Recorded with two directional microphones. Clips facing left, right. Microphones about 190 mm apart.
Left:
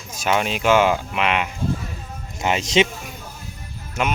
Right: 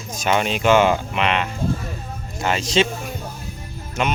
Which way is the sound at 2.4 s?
20° left (ahead or behind).